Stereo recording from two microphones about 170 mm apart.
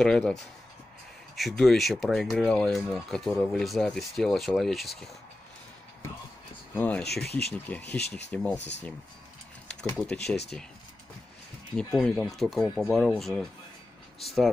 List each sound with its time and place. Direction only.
0.0 s speech: 5° left (ahead or behind)
6.8 s speech: 10° left (ahead or behind)
7.2 s speech: 70° left (ahead or behind)
7.5 s speech: 10° left (ahead or behind)
8.5 s speech: 90° left
9.8 s speech: 10° left (ahead or behind)
12.0 s speech: 5° left (ahead or behind)